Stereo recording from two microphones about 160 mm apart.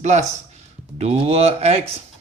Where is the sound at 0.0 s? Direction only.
45° right (ahead or behind).